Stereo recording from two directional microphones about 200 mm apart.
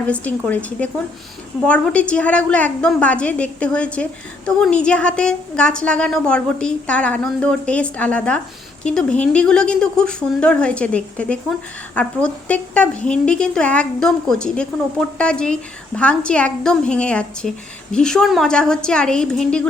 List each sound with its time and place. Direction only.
0.1 s a woman's voice: 10° left (ahead or behind)